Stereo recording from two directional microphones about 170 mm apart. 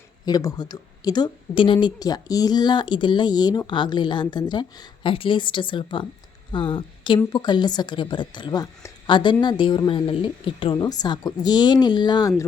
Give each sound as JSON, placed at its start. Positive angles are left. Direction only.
{"t": 0.3, "sound": "a woman's voice", "side_deg": 20}